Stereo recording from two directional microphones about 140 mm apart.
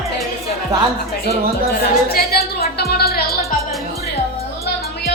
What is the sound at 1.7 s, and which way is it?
Music, 90° left.